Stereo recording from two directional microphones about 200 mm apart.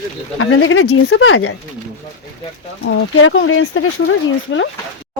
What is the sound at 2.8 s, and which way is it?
Speech, 75° left (ahead or behind).